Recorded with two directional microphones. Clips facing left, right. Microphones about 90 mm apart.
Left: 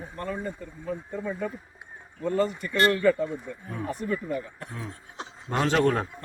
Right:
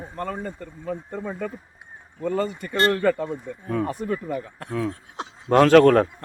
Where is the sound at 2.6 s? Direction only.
70° right (ahead or behind).